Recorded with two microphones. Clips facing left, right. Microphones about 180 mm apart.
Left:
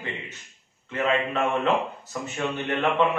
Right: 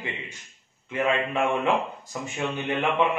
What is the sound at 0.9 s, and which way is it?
A man's voice, 10° right (ahead or behind).